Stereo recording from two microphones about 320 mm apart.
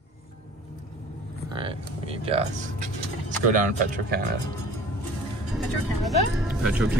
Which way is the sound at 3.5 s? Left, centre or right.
Right.